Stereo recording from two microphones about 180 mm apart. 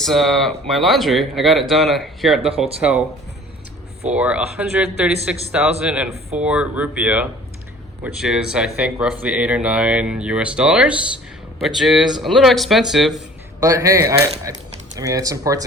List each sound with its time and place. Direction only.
0.0 s speech: centre (ahead or behind)
4.1 s speech: 5° right (ahead or behind)
13.6 s speech: 20° right (ahead or behind)